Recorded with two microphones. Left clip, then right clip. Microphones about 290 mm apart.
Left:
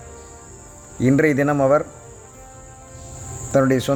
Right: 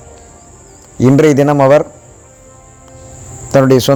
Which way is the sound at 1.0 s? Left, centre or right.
Centre.